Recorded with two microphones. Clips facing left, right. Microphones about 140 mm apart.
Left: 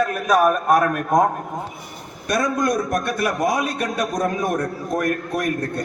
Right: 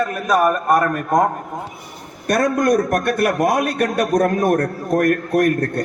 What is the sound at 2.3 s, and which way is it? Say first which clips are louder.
A man's voice: right 4 dB; 60° right (ahead or behind).